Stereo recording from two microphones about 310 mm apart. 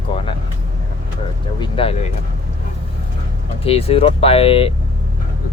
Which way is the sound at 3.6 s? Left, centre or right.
Centre.